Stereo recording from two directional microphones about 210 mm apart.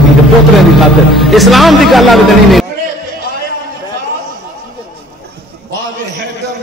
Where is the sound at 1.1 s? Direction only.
Centre (ahead or behind).